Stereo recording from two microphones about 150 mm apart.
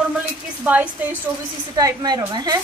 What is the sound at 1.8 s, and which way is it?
Speech, 25° right (ahead or behind).